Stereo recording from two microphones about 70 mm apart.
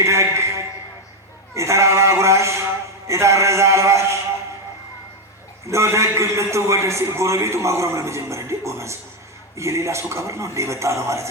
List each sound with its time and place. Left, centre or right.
0.0 s a sound: right
1.5 s sheep: right
3.1 s a man's voice: right
5.6 s a man's voice: right